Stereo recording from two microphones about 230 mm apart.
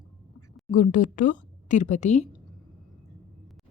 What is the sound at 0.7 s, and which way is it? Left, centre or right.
Speech, left.